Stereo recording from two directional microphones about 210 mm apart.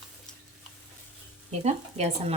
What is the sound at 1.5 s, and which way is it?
Speech, 30° right (ahead or behind).